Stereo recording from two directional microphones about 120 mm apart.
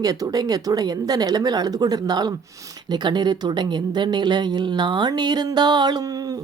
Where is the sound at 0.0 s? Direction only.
30° right (ahead or behind).